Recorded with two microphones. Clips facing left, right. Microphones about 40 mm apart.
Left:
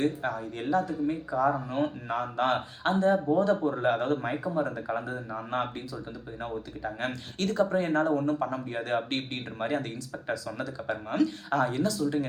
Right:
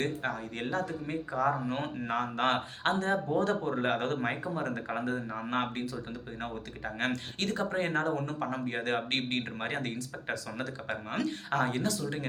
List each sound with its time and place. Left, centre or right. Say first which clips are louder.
0.0 s a man's voice: left 4 dB; right
7.3 s a man's voice: left 9 dB; right